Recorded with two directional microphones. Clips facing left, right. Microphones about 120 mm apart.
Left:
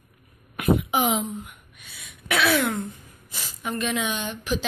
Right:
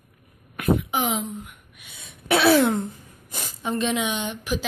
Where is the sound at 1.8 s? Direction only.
25° right (ahead or behind).